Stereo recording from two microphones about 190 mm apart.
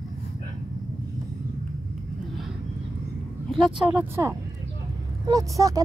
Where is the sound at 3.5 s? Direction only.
5° right (ahead or behind).